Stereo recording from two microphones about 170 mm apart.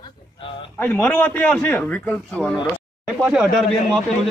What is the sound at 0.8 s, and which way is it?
A man's voice, 10° left (ahead or behind).